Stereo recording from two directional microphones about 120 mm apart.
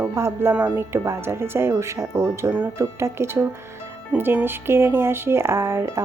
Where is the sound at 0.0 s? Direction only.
20° right (ahead or behind).